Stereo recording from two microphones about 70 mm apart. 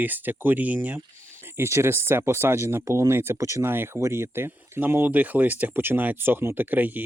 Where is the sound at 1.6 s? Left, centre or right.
Right.